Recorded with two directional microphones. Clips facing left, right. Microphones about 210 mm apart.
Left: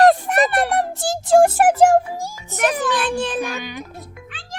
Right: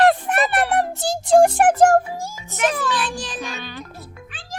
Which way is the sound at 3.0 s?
60° left (ahead or behind).